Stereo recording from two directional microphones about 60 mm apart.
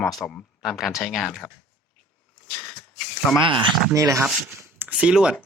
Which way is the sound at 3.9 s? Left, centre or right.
Right.